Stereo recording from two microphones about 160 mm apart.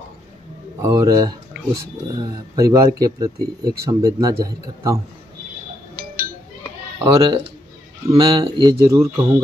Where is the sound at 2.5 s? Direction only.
20° right (ahead or behind).